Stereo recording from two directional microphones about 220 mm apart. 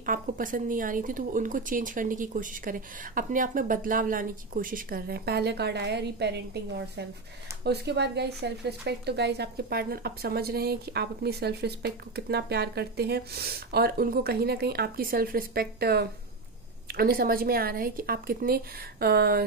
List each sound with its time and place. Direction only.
0.0 s a woman's voice: 40° right (ahead or behind)